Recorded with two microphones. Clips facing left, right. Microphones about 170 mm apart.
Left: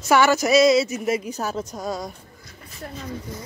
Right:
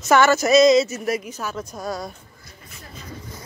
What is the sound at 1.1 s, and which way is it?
Speech, 35° left (ahead or behind).